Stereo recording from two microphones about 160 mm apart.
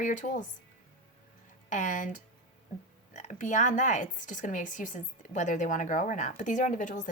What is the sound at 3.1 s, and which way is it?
Speech, 50° left (ahead or behind).